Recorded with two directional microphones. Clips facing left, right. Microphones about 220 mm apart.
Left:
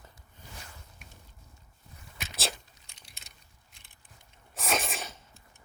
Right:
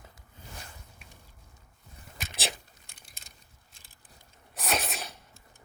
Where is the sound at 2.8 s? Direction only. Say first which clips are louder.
Right 1 dB; 55° right (ahead or behind).